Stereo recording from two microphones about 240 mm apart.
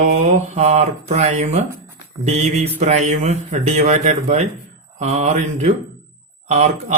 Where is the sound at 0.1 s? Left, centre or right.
Right.